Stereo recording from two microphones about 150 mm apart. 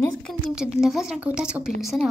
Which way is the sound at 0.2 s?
Centre (ahead or behind).